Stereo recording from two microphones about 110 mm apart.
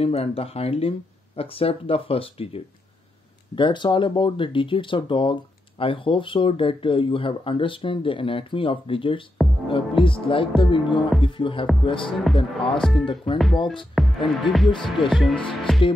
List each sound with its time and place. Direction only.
0.0 s speech: 65° left (ahead or behind)
3.5 s speech: 45° left (ahead or behind)
12.1 s speech: centre (ahead or behind)
12.4 s speech: 50° left (ahead or behind)
13.9 s speech: centre (ahead or behind)